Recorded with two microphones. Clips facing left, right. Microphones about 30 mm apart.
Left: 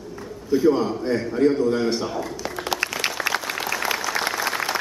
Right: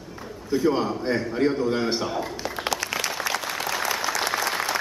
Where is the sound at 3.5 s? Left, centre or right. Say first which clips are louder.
Left 1 dB; centre.